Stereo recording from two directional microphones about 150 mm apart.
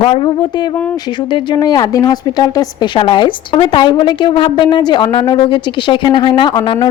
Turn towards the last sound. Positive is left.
turn(degrees=30)  # may be behind; listen again after turning